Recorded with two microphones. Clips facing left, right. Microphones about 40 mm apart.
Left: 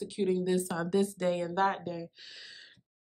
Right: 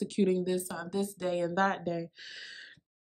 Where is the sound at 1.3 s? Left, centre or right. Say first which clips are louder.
Even; centre.